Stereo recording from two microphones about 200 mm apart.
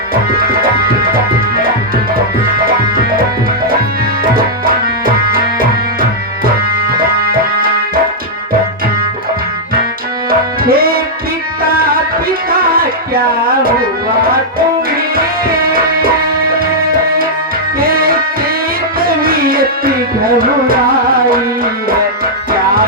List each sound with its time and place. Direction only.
10.6 s music: 45° right (ahead or behind)
17.7 s music: 45° right (ahead or behind)